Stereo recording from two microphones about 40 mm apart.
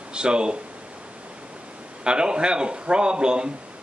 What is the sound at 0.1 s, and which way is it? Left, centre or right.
Speech, right.